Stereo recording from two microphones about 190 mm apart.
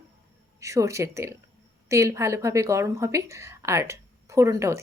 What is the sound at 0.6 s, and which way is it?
Speech, 15° right (ahead or behind).